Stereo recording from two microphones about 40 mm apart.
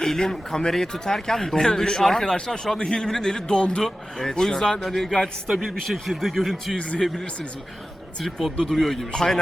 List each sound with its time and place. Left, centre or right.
0.0 s a man's voice: centre
3.8 s a man's voice: centre
5.5 s speech: centre
6.7 s speech: left
8.2 s a man's voice: centre